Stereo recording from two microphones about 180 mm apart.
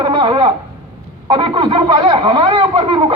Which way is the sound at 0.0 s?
25° right (ahead or behind).